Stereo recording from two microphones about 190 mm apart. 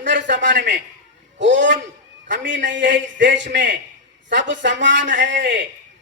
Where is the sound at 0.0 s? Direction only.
70° right (ahead or behind).